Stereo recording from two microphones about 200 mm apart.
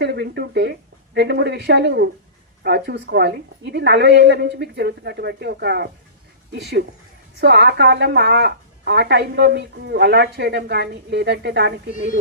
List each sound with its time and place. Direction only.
0.0 s a woman's voice: 55° right (ahead or behind)